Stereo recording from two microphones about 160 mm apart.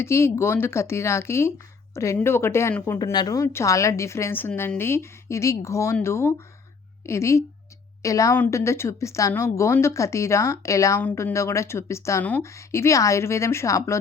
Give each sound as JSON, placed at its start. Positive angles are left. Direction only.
{"t": 0.0, "sound": "a woman's voice", "side_deg": 15}